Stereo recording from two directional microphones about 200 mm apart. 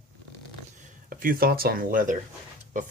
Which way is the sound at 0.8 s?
45° right (ahead or behind).